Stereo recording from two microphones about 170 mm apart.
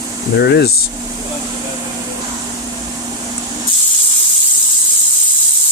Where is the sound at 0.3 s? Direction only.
75° left (ahead or behind).